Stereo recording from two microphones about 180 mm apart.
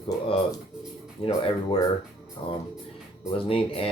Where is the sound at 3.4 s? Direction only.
30° left (ahead or behind).